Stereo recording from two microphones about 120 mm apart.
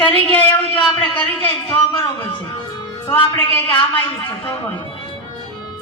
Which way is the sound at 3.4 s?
15° left (ahead or behind).